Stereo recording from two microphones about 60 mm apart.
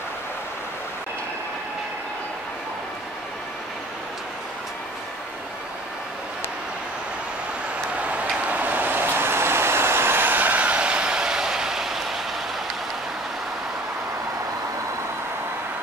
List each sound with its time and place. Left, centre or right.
8.0 s vehicle: right; by 12.2 s centre